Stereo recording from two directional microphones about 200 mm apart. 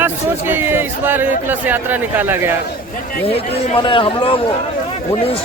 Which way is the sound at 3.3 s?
25° left (ahead or behind).